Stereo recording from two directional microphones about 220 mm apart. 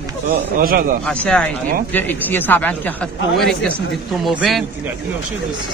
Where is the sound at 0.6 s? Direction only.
40° right (ahead or behind).